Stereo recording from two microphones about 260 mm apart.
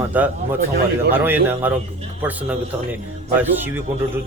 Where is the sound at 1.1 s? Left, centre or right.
Centre.